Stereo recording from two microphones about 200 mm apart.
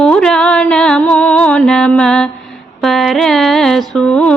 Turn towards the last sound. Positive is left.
turn(degrees=5)  # may be behind; listen again after turning